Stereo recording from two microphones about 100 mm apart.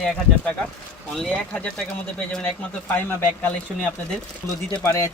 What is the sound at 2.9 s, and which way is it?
Speech, 20° left (ahead or behind).